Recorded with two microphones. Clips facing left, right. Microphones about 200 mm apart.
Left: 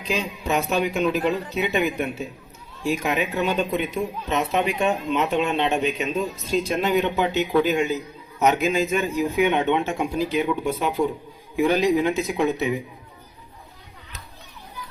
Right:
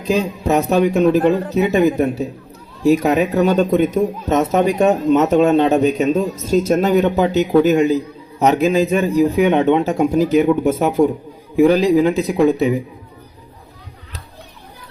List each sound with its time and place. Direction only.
0.0 s a man's voice: 40° right (ahead or behind)